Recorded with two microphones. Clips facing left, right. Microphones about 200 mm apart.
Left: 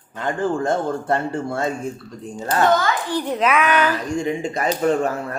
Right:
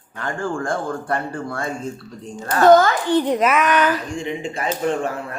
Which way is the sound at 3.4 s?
5° right (ahead or behind).